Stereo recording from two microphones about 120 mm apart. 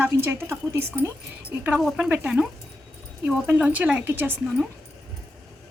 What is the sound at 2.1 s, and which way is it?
Speech, 5° right (ahead or behind).